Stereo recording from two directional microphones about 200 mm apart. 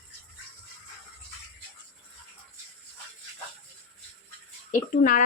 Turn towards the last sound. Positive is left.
turn(degrees=40)  # may be behind; listen again after turning